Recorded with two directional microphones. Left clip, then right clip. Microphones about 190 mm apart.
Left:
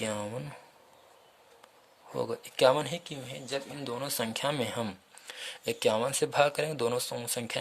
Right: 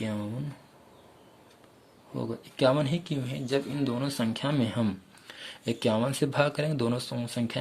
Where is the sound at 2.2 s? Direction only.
50° left (ahead or behind).